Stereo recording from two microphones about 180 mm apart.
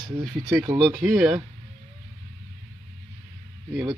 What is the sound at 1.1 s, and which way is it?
Speech, 5° right (ahead or behind).